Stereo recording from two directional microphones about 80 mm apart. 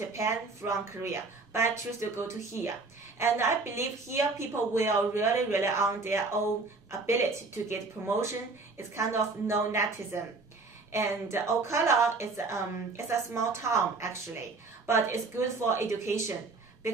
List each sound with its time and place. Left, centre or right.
0.1 s a woman's voice: right
10.9 s a woman's voice: right